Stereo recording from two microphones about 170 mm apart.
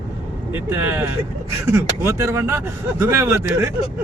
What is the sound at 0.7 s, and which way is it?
Speech, 15° right (ahead or behind).